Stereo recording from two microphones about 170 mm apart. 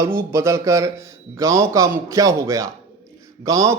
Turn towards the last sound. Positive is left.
turn(degrees=-20)  # may be behind; listen again after turning